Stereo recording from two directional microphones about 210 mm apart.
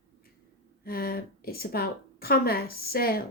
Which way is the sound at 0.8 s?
45° left (ahead or behind).